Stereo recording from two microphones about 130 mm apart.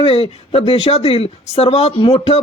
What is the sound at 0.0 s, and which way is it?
Speech, 50° left (ahead or behind).